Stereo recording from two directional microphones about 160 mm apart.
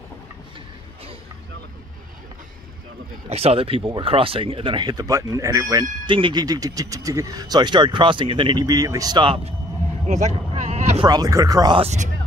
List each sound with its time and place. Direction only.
3.3 s speech: 40° right (ahead or behind)
10.0 s sheep: 50° right (ahead or behind)
11.0 s speech: 25° right (ahead or behind)
11.8 s speech: 45° right (ahead or behind)